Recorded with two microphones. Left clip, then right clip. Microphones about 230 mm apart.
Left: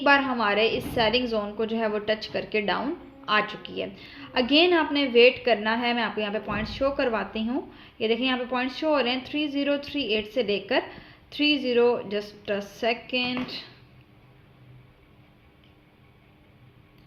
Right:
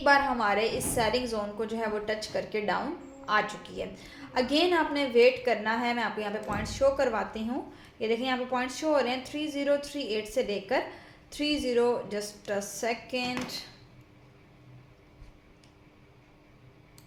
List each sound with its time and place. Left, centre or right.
0.0 s a woman's voice: left